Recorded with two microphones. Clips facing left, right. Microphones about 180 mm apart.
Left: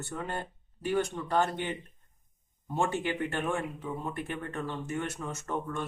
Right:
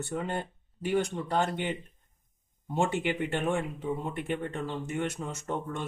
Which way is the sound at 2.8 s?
20° right (ahead or behind).